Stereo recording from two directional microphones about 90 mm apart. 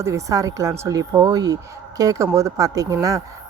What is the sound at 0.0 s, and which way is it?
A woman's voice, 35° right (ahead or behind).